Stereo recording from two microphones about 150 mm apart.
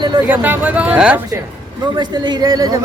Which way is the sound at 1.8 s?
30° right (ahead or behind).